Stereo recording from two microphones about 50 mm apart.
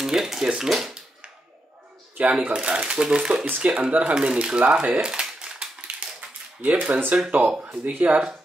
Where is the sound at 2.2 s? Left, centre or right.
Right.